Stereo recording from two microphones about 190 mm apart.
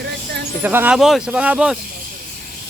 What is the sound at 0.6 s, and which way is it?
Speech, 10° right (ahead or behind).